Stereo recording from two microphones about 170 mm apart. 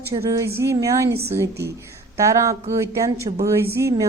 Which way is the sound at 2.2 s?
20° right (ahead or behind).